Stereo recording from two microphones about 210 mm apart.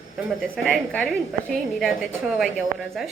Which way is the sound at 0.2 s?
5° right (ahead or behind).